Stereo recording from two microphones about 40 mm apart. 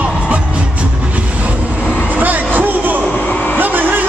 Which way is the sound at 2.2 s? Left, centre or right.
Right.